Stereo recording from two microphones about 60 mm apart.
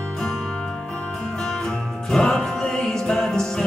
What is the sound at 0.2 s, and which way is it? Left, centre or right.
Music, centre.